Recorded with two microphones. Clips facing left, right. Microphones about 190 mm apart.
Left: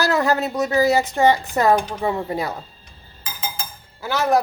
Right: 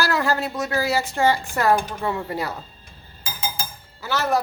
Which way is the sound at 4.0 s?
15° left (ahead or behind).